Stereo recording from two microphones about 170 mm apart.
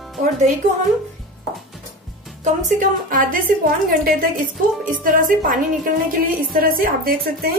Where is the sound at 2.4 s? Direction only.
50° right (ahead or behind).